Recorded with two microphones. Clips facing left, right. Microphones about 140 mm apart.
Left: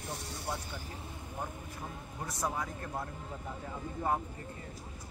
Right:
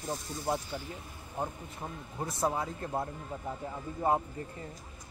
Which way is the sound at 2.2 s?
25° right (ahead or behind).